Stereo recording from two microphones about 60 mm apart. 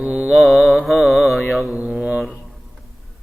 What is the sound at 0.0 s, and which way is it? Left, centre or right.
Mantra, right.